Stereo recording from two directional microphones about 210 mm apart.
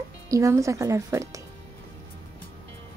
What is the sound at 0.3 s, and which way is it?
Speech, 15° right (ahead or behind).